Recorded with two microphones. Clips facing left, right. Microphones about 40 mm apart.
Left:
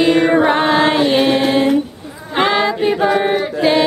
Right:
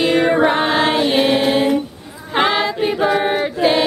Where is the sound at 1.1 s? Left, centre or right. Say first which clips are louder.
Left 1 dB; centre.